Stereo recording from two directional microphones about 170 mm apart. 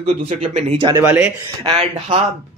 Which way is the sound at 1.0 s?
10° right (ahead or behind).